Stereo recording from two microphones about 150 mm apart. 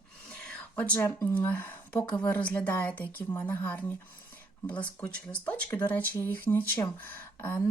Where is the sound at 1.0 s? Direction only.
20° left (ahead or behind).